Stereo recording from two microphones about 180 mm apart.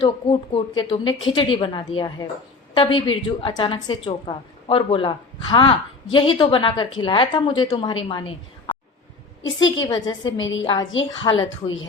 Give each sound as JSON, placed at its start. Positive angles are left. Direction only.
{"t": 0.0, "sound": "a woman's voice", "side_deg": 25}
{"t": 9.4, "sound": "a woman's voice", "side_deg": 90}
{"t": 9.8, "sound": "a woman's voice", "side_deg": 25}
{"t": 10.3, "sound": "a woman's voice", "side_deg": 90}
{"t": 10.6, "sound": "a woman's voice", "side_deg": 20}
{"t": 11.4, "sound": "a woman's voice", "side_deg": 90}